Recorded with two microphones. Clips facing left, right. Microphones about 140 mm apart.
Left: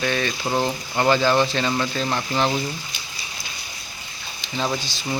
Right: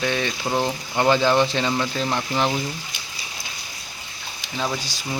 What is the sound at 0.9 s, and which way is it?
Speech, 15° right (ahead or behind).